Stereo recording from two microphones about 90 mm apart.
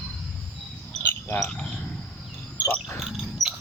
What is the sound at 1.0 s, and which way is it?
Cricket, 25° left (ahead or behind).